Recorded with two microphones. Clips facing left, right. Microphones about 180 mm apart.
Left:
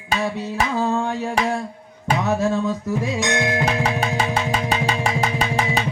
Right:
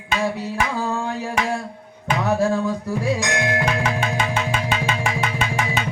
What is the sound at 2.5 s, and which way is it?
Music, 20° left (ahead or behind).